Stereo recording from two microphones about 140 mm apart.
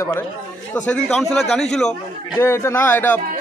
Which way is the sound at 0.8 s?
5° left (ahead or behind).